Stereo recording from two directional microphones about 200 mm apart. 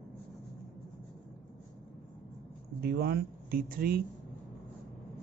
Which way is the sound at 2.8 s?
50° right (ahead or behind).